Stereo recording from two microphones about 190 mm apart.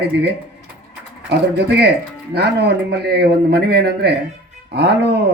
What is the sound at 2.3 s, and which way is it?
A man's voice, 60° right (ahead or behind).